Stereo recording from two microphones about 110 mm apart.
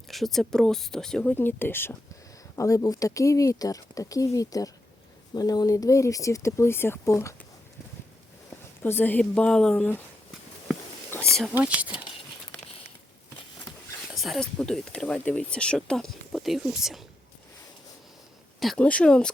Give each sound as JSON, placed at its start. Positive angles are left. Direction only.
{"t": 0.1, "sound": "speech", "side_deg": 0}
{"t": 1.4, "sound": "speech", "side_deg": 20}
{"t": 2.6, "sound": "speech", "side_deg": 30}
{"t": 8.8, "sound": "a woman's voice", "side_deg": 20}
{"t": 11.1, "sound": "whispering", "side_deg": 20}
{"t": 11.5, "sound": "speech", "side_deg": -15}
{"t": 13.7, "sound": "a sound", "side_deg": 0}
{"t": 14.4, "sound": "speech", "side_deg": 5}
{"t": 18.6, "sound": "a woman's voice", "side_deg": 5}